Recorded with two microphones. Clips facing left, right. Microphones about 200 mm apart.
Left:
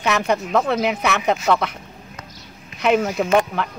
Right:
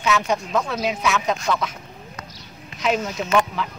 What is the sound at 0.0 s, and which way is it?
Speech, 60° left (ahead or behind).